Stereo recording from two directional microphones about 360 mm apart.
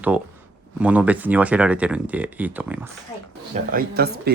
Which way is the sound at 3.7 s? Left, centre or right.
Right.